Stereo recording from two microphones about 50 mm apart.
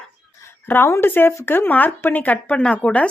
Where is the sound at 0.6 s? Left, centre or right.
Left.